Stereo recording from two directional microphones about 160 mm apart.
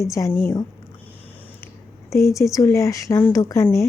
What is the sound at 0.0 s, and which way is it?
Speech, 20° left (ahead or behind).